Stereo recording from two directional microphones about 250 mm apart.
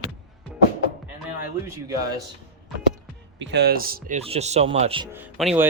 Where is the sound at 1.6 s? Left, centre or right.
Centre.